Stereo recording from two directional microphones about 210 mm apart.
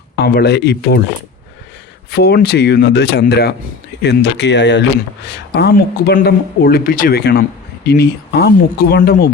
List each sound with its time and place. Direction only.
0.2 s speech: 50° left (ahead or behind)
2.0 s speech: 50° left (ahead or behind)